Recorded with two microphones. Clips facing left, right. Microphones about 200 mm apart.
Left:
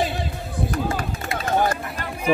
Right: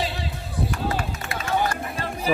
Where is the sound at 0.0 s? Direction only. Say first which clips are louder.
Left 4 dB; 50° left (ahead or behind).